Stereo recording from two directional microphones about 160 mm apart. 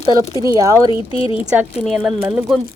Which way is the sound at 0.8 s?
35° left (ahead or behind).